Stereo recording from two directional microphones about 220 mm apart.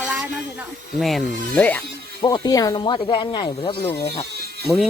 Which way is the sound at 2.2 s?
15° left (ahead or behind).